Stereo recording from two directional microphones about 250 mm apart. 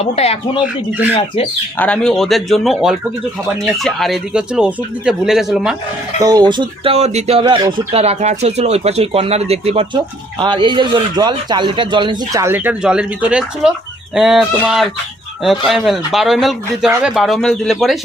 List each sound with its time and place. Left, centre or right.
0.0 s speech: left
1.8 s speech: centre
6.1 s speech: centre